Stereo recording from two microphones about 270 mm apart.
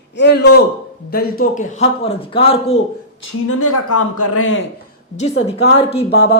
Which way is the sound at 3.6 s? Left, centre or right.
Left.